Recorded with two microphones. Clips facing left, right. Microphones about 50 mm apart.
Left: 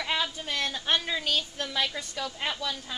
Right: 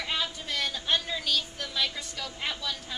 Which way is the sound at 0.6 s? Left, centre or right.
Left.